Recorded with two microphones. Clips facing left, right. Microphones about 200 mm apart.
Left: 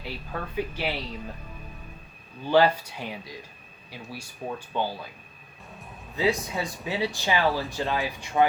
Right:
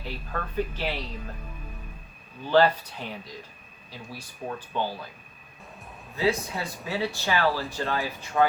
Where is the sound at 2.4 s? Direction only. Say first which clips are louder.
Even; 15° left (ahead or behind).